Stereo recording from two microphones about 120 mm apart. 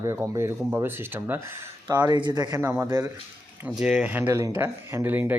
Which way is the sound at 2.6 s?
20° right (ahead or behind).